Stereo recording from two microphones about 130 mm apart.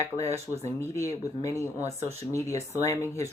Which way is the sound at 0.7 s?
20° left (ahead or behind).